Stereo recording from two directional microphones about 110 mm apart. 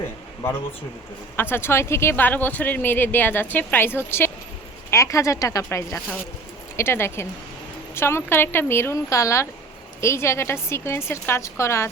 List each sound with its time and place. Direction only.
1.4 s a woman's voice: 20° left (ahead or behind)